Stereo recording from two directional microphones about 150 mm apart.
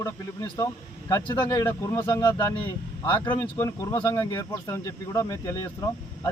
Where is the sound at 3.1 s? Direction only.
30° left (ahead or behind).